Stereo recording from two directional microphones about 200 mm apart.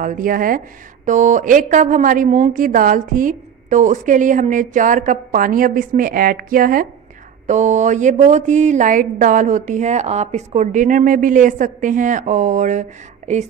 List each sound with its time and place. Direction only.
0.0 s a woman's voice: 45° right (ahead or behind)